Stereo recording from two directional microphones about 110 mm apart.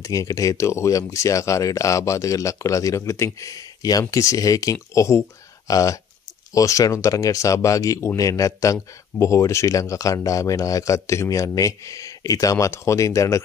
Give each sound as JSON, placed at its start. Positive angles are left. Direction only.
{"t": 0.0, "sound": "speech", "side_deg": 30}